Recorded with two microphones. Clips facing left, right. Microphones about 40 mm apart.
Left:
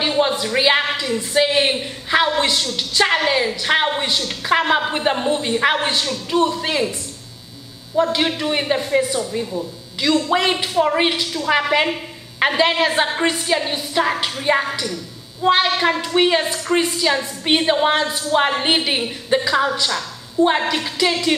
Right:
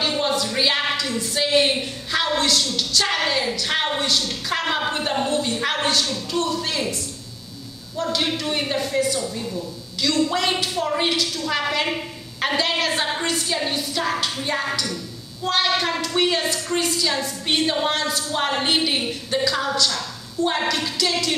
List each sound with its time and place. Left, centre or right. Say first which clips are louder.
0.0 s speech: left 4 dB; left